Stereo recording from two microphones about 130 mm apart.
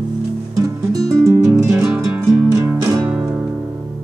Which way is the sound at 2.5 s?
20° right (ahead or behind).